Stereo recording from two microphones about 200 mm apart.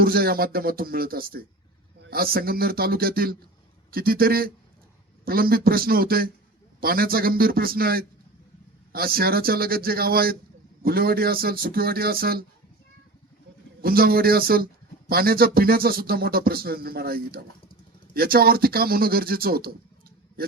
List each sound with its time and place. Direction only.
0.0 s speech: 50° right (ahead or behind)
13.8 s speech: 50° right (ahead or behind)